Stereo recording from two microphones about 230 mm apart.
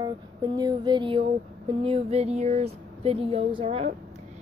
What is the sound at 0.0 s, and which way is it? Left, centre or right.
A woman's voice, centre.